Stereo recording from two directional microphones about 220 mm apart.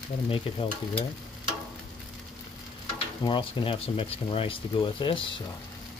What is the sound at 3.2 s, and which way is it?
Speech, 20° left (ahead or behind).